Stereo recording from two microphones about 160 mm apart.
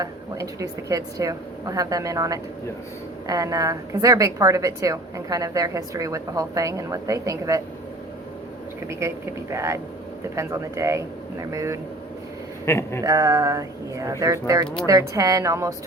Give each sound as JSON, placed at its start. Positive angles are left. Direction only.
{"t": 0.0, "sound": "a woman's voice", "side_deg": -20}
{"t": 8.9, "sound": "a woman's voice", "side_deg": -15}
{"t": 12.6, "sound": "speech", "side_deg": 15}
{"t": 13.0, "sound": "a woman's voice", "side_deg": -20}